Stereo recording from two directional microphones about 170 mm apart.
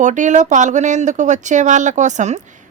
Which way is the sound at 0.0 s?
45° right (ahead or behind).